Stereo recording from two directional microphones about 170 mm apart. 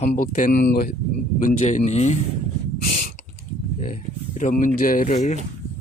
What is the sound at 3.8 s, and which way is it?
Speech, 45° left (ahead or behind).